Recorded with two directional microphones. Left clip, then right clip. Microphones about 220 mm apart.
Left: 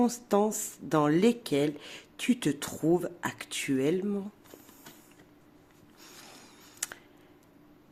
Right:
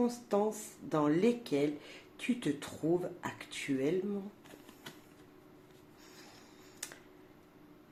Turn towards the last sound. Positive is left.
turn(degrees=40)  # may be behind; listen again after turning